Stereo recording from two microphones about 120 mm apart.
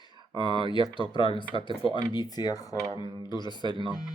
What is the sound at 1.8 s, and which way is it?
Speech, 40° left (ahead or behind).